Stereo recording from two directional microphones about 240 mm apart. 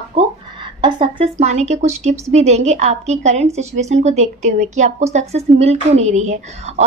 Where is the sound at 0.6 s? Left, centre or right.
Centre.